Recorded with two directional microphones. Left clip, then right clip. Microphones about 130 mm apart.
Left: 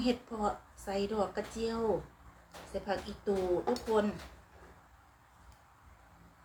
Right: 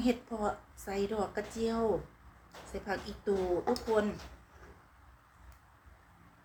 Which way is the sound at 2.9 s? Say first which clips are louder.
Even; 30° right (ahead or behind).